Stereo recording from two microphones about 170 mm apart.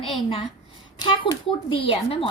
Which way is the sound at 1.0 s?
25° left (ahead or behind).